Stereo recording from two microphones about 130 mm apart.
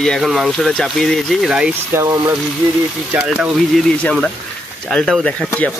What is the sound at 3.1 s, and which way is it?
Speech, 5° right (ahead or behind).